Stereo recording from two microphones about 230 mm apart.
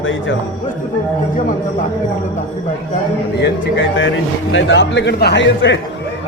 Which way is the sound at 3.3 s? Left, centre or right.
Left.